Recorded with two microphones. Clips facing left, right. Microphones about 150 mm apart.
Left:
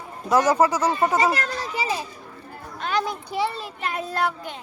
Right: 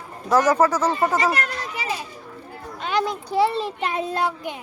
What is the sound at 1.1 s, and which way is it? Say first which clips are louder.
Children playing: left 1 dB; 35° left (ahead or behind).